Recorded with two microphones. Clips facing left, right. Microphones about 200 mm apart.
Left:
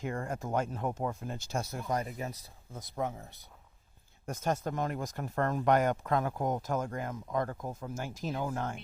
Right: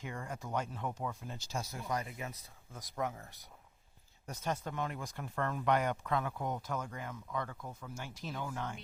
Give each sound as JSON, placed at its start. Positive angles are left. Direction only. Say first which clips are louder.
{"t": 0.0, "sound": "speech", "louder": "left 7 dB", "side_deg": 45}
{"t": 4.3, "sound": "speech", "louder": "left 6 dB", "side_deg": 45}